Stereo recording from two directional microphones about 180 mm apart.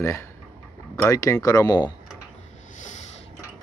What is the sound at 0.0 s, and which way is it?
Speech, 15° left (ahead or behind).